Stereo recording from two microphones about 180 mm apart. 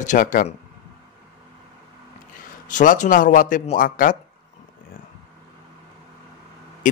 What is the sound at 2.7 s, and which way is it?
A man's voice, 45° left (ahead or behind).